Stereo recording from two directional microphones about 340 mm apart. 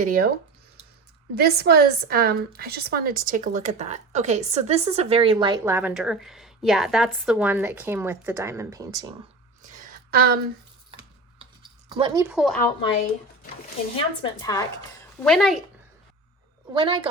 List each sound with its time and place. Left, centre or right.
0.0 s speech: right
1.4 s speech: right; by 9.0 s centre
9.6 s a sound: right
11.9 s speech: centre
13.9 s a woman's voice: centre
16.7 s speech: centre